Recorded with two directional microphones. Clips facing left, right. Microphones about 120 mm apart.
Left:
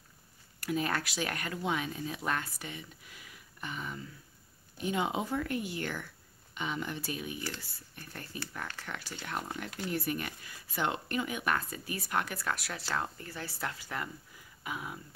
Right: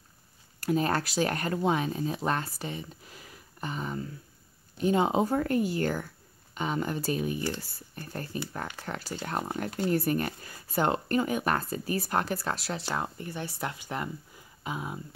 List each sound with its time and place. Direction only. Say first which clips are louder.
0.6 s speech: right 6 dB; 35° right (ahead or behind)